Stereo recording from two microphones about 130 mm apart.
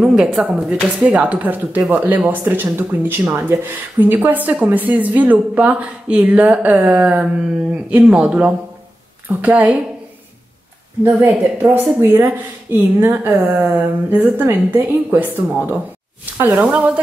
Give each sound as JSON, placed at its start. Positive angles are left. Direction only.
{"t": 0.0, "sound": "speech", "side_deg": -5}
{"t": 11.1, "sound": "speech", "side_deg": -15}
{"t": 16.6, "sound": "speech", "side_deg": -10}